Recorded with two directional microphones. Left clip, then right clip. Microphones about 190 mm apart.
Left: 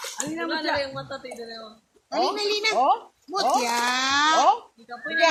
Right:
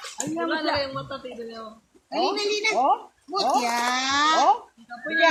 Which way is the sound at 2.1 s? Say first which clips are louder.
Left 1 dB; 60° left (ahead or behind).